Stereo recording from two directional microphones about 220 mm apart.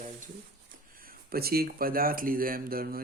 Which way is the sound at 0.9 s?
40° right (ahead or behind).